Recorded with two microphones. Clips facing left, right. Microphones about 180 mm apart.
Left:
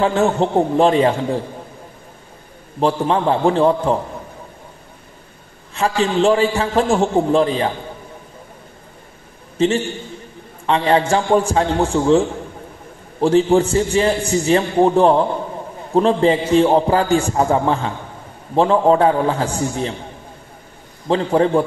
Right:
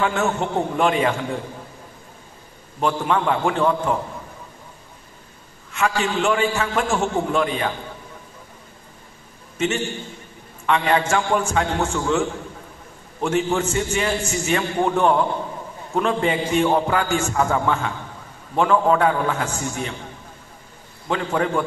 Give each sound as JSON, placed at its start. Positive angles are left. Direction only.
{"t": 0.0, "sound": "a man's voice", "side_deg": 35}
{"t": 2.8, "sound": "a man's voice", "side_deg": 35}
{"t": 5.7, "sound": "a man's voice", "side_deg": 35}
{"t": 9.6, "sound": "a man's voice", "side_deg": 35}
{"t": 21.1, "sound": "a man's voice", "side_deg": 30}